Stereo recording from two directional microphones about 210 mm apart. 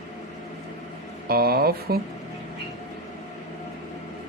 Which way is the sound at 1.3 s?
45° right (ahead or behind).